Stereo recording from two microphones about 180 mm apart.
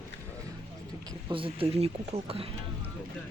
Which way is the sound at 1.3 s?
30° right (ahead or behind).